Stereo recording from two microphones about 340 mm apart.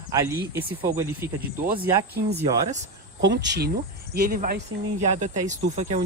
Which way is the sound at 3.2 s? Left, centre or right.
Right.